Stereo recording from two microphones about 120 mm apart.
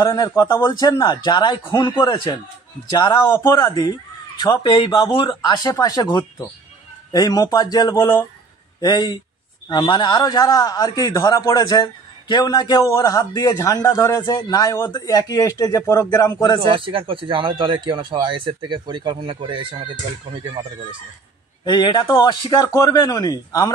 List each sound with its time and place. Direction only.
0.0 s a man's voice: 30° left (ahead or behind)
3.3 s a man's voice: 25° left (ahead or behind)
14.2 s a man's voice: 35° left (ahead or behind)
16.6 s speech: 45° right (ahead or behind)
21.6 s a man's voice: 40° left (ahead or behind)